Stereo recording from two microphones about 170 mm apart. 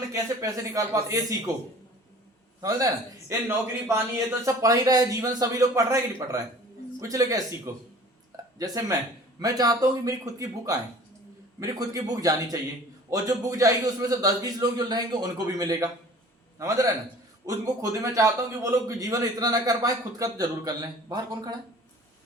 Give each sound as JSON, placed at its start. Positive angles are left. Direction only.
{"t": 0.1, "sound": "a man's voice", "side_deg": -20}
{"t": 2.6, "sound": "a man's voice", "side_deg": -20}